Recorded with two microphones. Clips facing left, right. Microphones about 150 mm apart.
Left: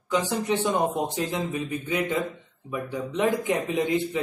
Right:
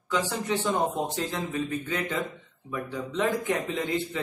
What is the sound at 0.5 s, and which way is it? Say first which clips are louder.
A man's voice: left 2 dB; 15° left (ahead or behind).